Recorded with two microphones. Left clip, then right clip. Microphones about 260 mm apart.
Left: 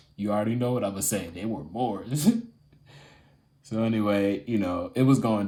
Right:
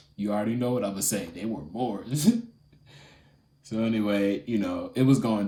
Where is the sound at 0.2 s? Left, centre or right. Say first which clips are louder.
Left 1 dB; left.